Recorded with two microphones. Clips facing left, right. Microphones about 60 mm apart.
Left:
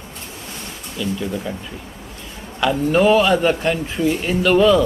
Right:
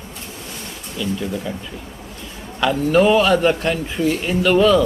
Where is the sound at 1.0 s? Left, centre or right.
Centre.